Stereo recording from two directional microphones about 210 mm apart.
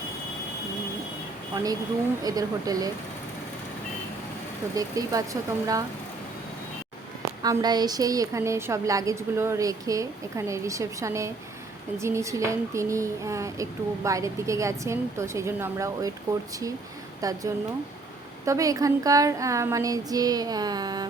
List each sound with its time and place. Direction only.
2.2 s speech: 15° right (ahead or behind)
4.7 s speech: 15° right (ahead or behind)
7.4 s speech: 20° right (ahead or behind)